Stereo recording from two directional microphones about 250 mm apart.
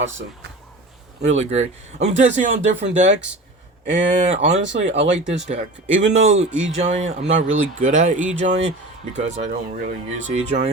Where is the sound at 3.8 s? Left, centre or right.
Right.